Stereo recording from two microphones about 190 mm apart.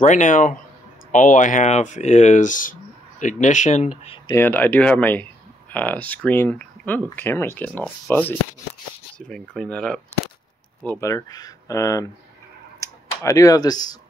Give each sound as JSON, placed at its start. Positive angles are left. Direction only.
{"t": 0.0, "sound": "speech", "side_deg": 40}
{"t": 4.4, "sound": "speech", "side_deg": 10}
{"t": 11.1, "sound": "speech", "side_deg": 20}